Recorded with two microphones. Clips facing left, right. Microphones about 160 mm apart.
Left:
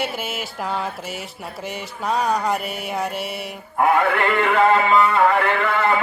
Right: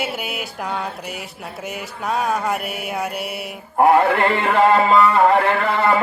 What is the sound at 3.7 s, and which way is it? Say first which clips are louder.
Mantra: right 4 dB; 35° right (ahead or behind).